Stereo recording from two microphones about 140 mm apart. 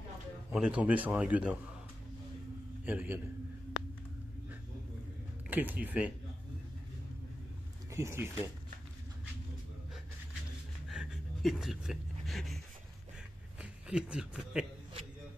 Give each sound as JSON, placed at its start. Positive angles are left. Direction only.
{"t": 0.5, "sound": "a man's voice", "side_deg": -5}
{"t": 2.8, "sound": "a man's voice", "side_deg": -10}
{"t": 5.5, "sound": "a man's voice", "side_deg": -15}
{"t": 7.9, "sound": "speech", "side_deg": -20}
{"t": 10.9, "sound": "a sound", "side_deg": 0}
{"t": 13.6, "sound": "speech", "side_deg": -5}